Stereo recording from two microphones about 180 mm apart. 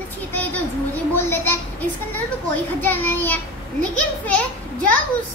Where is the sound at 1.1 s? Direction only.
10° left (ahead or behind).